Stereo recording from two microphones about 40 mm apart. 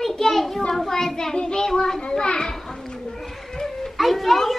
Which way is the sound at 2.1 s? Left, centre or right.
Centre.